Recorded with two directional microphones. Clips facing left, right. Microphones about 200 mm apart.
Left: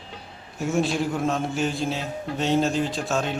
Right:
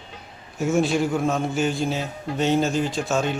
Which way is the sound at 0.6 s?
Centre (ahead or behind).